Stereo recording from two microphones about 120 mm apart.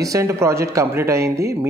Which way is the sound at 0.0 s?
25° right (ahead or behind).